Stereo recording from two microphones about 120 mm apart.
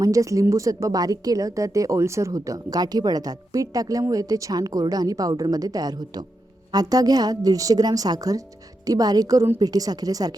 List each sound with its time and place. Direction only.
0.0 s a woman's voice: 25° right (ahead or behind)